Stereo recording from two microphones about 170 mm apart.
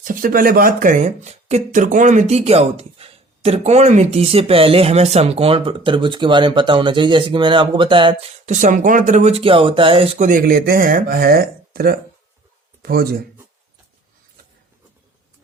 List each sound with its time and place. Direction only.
0.0 s speech: 55° right (ahead or behind); by 8.3 s 30° right (ahead or behind)
8.4 s speech: 45° right (ahead or behind)
10.2 s speech: 55° right (ahead or behind)